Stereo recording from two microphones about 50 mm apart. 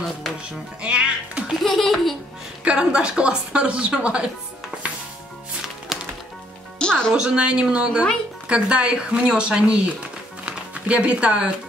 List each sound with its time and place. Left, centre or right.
0.8 s music: right
1.6 s a child's voice: centre
2.6 s a woman's voice: right
5.9 s music: centre
6.8 s music: centre
7.2 s a woman's voice: right
10.4 s music: right